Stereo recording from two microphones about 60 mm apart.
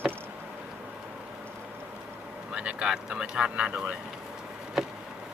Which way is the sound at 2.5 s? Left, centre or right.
Centre.